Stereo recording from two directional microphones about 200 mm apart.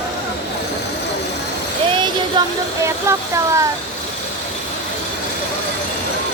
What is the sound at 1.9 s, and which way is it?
Speech, 20° right (ahead or behind).